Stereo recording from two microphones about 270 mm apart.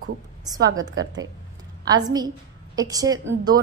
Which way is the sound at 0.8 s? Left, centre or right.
Right.